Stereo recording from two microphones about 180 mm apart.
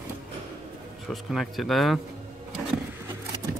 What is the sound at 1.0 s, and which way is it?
Speech, centre (ahead or behind).